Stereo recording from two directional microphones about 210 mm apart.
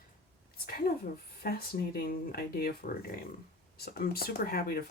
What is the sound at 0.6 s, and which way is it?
Speech, 45° left (ahead or behind).